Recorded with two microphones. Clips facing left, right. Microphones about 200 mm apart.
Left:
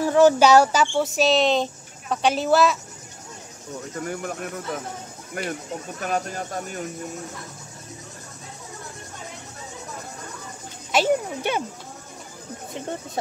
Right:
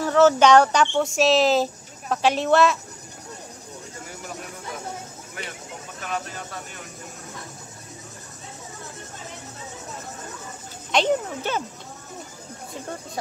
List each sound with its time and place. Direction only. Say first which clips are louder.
0.0 s speech: left 1 dB; 15° left (ahead or behind)
5.4 s speech: left 8 dB; 50° left (ahead or behind)
10.9 s speech: left 1 dB; 10° left (ahead or behind)